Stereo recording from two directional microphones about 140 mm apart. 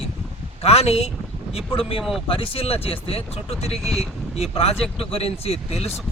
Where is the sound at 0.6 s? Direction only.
45° left (ahead or behind).